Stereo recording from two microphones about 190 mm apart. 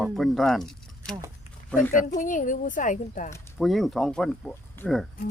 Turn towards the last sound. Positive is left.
turn(degrees=5)  # may be behind; listen again after turning